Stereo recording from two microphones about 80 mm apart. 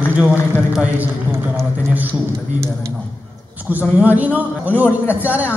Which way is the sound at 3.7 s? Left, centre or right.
Right.